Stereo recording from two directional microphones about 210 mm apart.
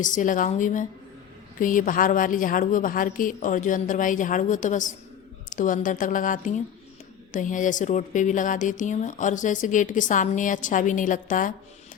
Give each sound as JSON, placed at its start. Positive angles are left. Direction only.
{"t": 0.0, "sound": "speech", "side_deg": 35}